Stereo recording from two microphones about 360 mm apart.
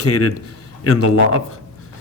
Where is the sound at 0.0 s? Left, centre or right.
Left.